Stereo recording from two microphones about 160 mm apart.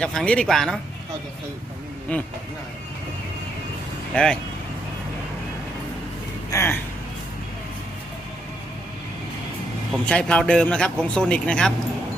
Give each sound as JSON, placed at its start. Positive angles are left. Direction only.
{"t": 0.0, "sound": "speech", "side_deg": 5}
{"t": 2.1, "sound": "a man's voice", "side_deg": 10}
{"t": 4.1, "sound": "speech", "side_deg": 5}
{"t": 6.5, "sound": "speech", "side_deg": 15}
{"t": 9.9, "sound": "a man's voice", "side_deg": 5}